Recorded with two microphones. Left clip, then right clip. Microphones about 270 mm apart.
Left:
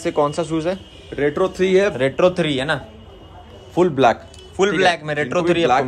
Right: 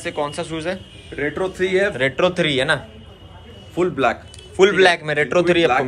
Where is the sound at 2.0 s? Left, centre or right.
Centre.